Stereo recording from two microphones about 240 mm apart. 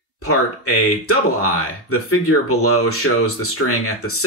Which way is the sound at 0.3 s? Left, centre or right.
Left.